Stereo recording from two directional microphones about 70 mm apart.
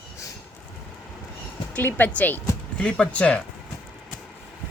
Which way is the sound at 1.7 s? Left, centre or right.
Left.